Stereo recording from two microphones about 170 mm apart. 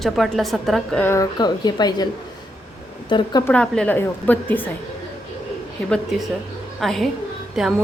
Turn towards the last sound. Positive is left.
turn(degrees=0)  # may be behind; listen again after turning